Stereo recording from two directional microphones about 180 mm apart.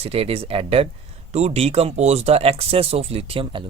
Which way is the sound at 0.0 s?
35° right (ahead or behind).